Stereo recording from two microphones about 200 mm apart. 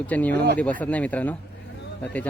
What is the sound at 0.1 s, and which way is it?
Speech, 10° left (ahead or behind).